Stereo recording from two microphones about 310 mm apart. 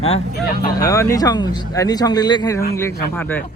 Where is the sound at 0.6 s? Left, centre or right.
Centre.